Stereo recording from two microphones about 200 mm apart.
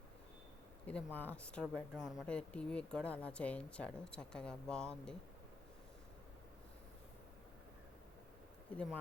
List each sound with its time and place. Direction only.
0.9 s speech: 10° left (ahead or behind)
8.7 s speech: 5° left (ahead or behind)